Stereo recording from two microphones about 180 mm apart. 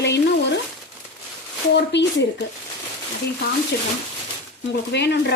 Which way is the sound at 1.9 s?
80° left.